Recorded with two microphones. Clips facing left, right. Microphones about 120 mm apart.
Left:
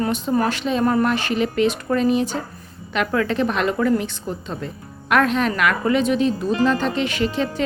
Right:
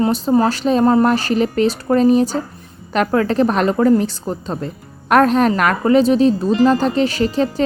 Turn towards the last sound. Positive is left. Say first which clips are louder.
# right 5 dB
turn(degrees=-35)  # may be behind; listen again after turning